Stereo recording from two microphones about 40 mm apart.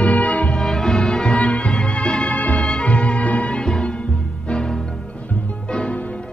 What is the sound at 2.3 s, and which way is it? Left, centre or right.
Music, left.